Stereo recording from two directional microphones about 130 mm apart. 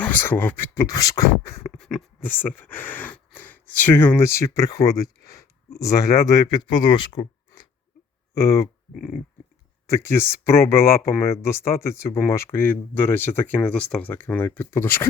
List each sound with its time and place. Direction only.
0.0 s speech: 15° left (ahead or behind)
1.7 s a sound: 5° left (ahead or behind)
2.6 s speech: 15° left (ahead or behind); by 7.6 s 35° left (ahead or behind)
8.4 s speech: 25° left (ahead or behind)
9.9 s speech: 20° left (ahead or behind)